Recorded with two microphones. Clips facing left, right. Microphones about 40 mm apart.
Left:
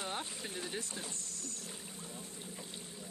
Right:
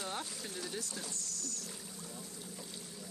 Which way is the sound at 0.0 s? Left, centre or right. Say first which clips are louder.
Left 1 dB; left.